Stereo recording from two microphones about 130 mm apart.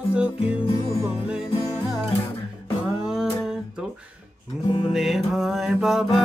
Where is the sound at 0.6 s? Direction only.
40° left (ahead or behind).